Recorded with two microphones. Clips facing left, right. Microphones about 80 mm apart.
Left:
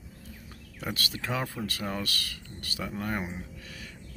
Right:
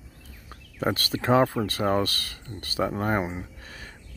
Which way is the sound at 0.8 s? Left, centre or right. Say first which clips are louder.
Right 8 dB; right.